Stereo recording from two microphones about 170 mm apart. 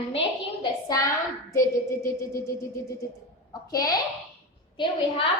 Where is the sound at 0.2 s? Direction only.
25° left (ahead or behind).